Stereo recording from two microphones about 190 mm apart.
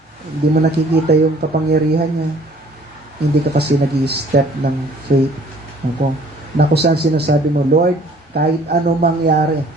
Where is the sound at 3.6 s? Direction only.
60° right (ahead or behind).